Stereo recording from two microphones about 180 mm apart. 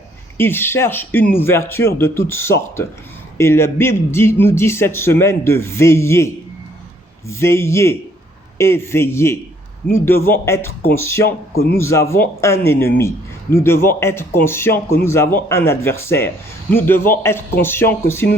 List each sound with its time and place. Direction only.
0.3 s speech: 10° left (ahead or behind)
11.5 s speech: 55° left (ahead or behind)
11.8 s speech: 15° left (ahead or behind)